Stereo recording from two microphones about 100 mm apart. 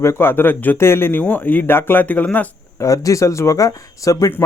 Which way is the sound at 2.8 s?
35° left (ahead or behind).